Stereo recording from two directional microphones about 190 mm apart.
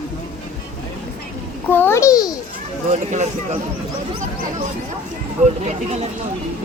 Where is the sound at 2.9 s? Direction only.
40° right (ahead or behind).